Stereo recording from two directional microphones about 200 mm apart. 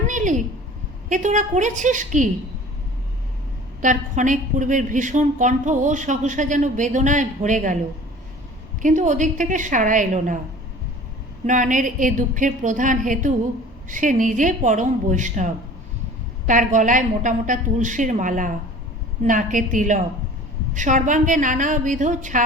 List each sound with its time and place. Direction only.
0.1 s a sound: 40° right (ahead or behind)
1.1 s a woman's voice: 40° right (ahead or behind)
3.8 s a woman's voice: 40° right (ahead or behind)
8.8 s a woman's voice: 40° right (ahead or behind)
11.4 s a woman's voice: 40° right (ahead or behind)